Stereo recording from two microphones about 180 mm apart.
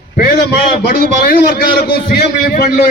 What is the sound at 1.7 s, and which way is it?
Speech, 55° left (ahead or behind).